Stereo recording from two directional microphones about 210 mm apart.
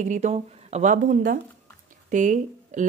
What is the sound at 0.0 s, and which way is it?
Speech, 35° right (ahead or behind).